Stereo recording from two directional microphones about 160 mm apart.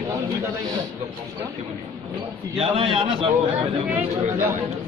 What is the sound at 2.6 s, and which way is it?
Speech, 35° right (ahead or behind).